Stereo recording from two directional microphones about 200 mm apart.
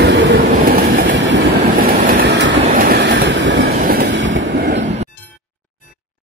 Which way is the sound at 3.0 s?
70° right (ahead or behind).